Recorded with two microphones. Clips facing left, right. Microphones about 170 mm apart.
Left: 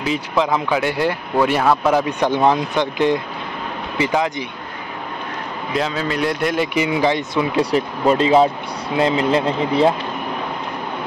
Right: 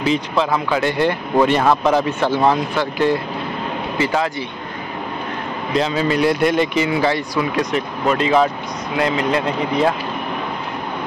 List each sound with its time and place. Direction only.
0.4 s speech: 15° left (ahead or behind)
5.8 s speech: centre (ahead or behind); by 9.9 s 30° left (ahead or behind)